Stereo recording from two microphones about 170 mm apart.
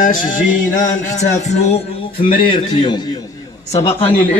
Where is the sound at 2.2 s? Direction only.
30° left (ahead or behind).